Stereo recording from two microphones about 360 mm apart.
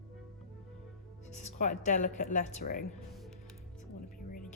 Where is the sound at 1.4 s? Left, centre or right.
Centre.